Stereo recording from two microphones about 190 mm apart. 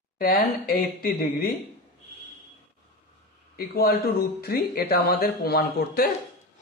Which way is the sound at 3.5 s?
55° left (ahead or behind).